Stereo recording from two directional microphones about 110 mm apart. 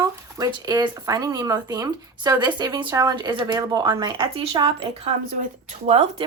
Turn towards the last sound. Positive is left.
turn(degrees=-65)  # may be behind; listen again after turning